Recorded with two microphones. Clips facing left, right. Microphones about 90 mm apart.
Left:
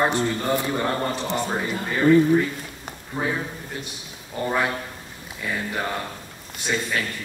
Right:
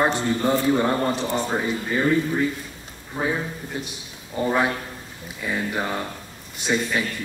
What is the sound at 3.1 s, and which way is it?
Speech, 15° right (ahead or behind).